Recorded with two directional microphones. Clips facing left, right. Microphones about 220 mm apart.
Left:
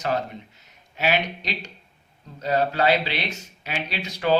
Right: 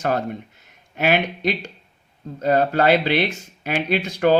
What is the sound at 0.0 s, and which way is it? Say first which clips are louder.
Speech: right 4 dB; 50° right (ahead or behind).